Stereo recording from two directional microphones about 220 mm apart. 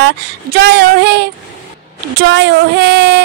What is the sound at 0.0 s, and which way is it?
Speech, 45° right (ahead or behind).